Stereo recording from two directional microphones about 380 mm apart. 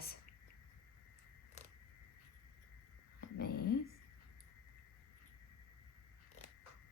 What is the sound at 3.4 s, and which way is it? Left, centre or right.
Speech, left.